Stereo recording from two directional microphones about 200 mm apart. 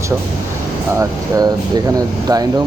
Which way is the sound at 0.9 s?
15° right (ahead or behind).